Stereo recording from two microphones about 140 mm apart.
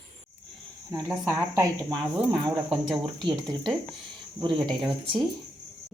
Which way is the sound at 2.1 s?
35° right (ahead or behind).